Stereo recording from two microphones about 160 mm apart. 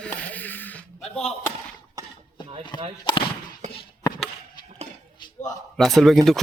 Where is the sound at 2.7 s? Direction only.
25° left (ahead or behind).